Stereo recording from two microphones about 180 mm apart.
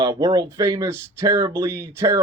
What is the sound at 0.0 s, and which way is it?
Speech, 20° right (ahead or behind).